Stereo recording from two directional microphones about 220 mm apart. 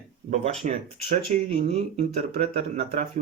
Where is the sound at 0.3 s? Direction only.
30° right (ahead or behind).